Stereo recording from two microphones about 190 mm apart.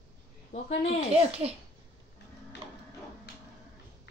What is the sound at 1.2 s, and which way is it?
Speech, 30° right (ahead or behind).